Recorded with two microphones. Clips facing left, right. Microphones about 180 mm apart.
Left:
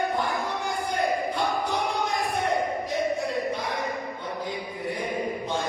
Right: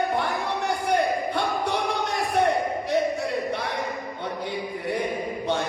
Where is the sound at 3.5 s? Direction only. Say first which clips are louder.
Right 1 dB; 70° right (ahead or behind).